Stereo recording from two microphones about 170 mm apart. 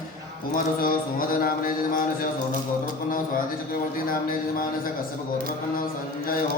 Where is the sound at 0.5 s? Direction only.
55° left (ahead or behind).